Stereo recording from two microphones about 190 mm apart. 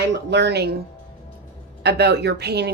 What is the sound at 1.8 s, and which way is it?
Speech, 60° right (ahead or behind).